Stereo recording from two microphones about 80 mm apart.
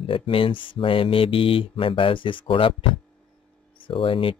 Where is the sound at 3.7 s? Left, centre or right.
Left.